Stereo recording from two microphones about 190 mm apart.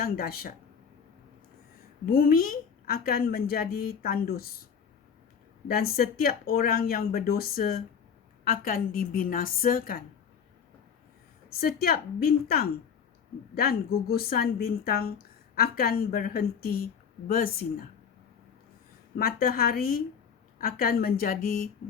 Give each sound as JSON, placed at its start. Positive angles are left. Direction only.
{"t": 0.0, "sound": "a woman's voice", "side_deg": 50}
{"t": 2.0, "sound": "a woman's voice", "side_deg": 50}
{"t": 5.6, "sound": "a woman's voice", "side_deg": 55}
{"t": 11.5, "sound": "a woman's voice", "side_deg": 50}
{"t": 13.6, "sound": "a woman's voice", "side_deg": 55}
{"t": 19.1, "sound": "a woman's voice", "side_deg": 50}